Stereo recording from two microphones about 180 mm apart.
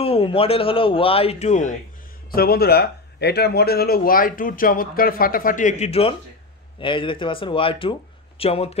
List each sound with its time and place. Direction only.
0.0 s speech: 30° left (ahead or behind)
2.3 s speech: 60° left (ahead or behind); by 8.7 s 35° left (ahead or behind)